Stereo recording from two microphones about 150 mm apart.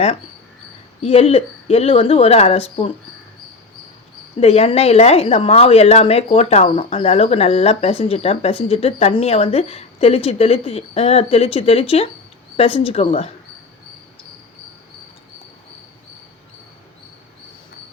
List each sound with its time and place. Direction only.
1.0 s a woman's voice: 40° left (ahead or behind)
4.4 s a woman's voice: 45° left (ahead or behind)